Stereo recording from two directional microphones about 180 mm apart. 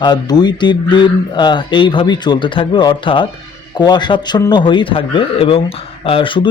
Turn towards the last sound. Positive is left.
turn(degrees=30)  # may be behind; listen again after turning